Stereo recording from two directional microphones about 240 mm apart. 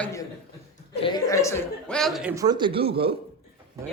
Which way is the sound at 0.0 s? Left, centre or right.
Centre.